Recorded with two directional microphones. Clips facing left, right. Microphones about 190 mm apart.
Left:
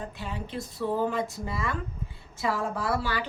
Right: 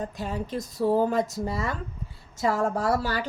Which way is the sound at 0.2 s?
40° right (ahead or behind).